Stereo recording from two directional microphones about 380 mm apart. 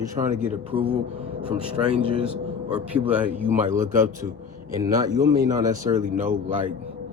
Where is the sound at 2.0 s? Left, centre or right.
Centre.